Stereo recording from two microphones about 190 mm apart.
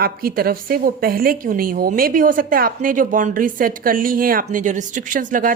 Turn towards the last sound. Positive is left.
turn(degrees=-45)  # may be behind; listen again after turning